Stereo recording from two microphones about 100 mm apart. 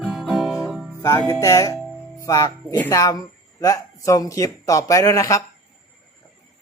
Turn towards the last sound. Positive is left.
turn(degrees=35)  # may be behind; listen again after turning